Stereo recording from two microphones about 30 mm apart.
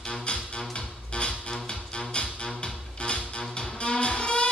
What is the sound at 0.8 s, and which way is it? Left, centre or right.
Music, left.